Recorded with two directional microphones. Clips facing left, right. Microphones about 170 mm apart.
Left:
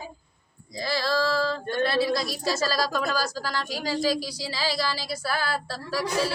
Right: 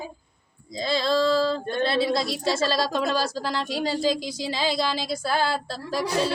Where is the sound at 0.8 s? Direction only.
25° right (ahead or behind).